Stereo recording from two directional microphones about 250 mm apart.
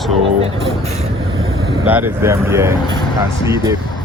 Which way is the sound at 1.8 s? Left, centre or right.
Centre.